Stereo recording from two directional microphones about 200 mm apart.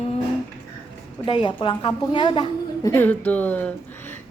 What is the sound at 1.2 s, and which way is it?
A woman's voice, 25° left (ahead or behind).